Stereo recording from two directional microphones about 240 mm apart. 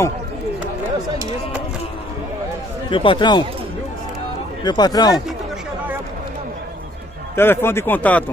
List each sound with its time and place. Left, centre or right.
1.1 s a sound: centre
2.9 s speech: left
4.6 s speech: centre
7.3 s speech: centre